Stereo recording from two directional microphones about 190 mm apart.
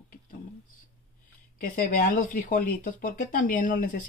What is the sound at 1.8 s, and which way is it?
Speech, 45° left (ahead or behind).